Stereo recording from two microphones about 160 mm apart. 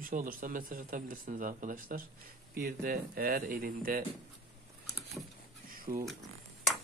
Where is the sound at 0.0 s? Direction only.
60° right (ahead or behind).